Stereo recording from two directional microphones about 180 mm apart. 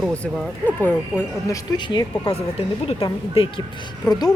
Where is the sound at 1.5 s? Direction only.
25° left (ahead or behind).